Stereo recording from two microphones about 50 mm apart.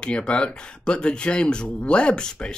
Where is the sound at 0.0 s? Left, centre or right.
Centre.